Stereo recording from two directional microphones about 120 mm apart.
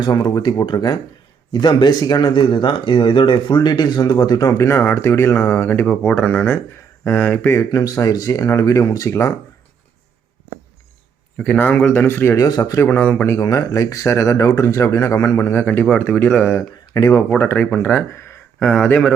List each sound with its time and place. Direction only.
0.0 s speech: 35° left (ahead or behind)
11.3 s speech: 10° left (ahead or behind)
12.5 s speech: 35° left (ahead or behind)
12.8 s speech: 15° left (ahead or behind)
13.2 s speech: 25° left (ahead or behind); by 16.6 s 10° left (ahead or behind)
16.6 s speech: 30° left (ahead or behind)
18.6 s speech: 10° left (ahead or behind)